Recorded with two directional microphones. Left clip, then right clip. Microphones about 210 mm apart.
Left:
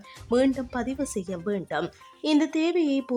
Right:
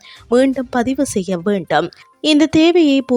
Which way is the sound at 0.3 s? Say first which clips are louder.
Right 9 dB; 40° right (ahead or behind).